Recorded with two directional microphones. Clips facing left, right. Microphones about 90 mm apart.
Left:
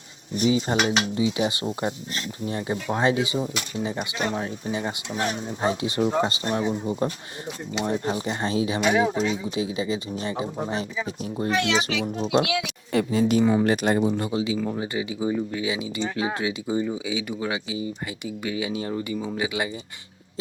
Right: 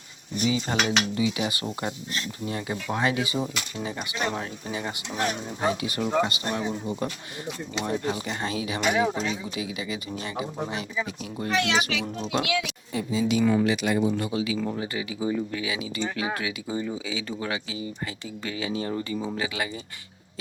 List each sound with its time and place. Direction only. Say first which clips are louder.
0.3 s dishes: left 4 dB; 30° left (ahead or behind)
11.2 s a child's voice: left 3 dB; 30° left (ahead or behind)
12.5 s a woman's voice: left 5 dB; 60° left (ahead or behind)
13.4 s dishes: left 2 dB; 25° left (ahead or behind)
13.7 s speech: left 3 dB; 45° left (ahead or behind)
14.1 s dishes: left 2 dB; 30° left (ahead or behind)
18.4 s speech: left 1 dB; 15° left (ahead or behind)
19.4 s dishes: left 3 dB; 20° left (ahead or behind)